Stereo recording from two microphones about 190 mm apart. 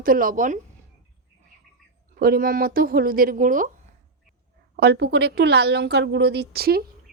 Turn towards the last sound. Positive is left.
turn(degrees=-55)  # may be behind; listen again after turning